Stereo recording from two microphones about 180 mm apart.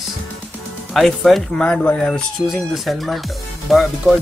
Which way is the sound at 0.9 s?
Centre (ahead or behind).